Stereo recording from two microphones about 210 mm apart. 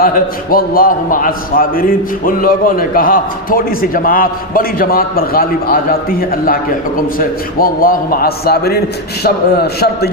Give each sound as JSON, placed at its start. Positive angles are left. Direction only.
{"t": 0.0, "sound": "a man's voice", "side_deg": 45}